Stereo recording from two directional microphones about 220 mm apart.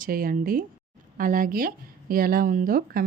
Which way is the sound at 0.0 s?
40° right (ahead or behind).